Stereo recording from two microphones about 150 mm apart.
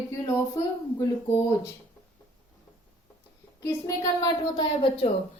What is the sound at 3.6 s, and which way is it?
A woman's voice, 25° left (ahead or behind).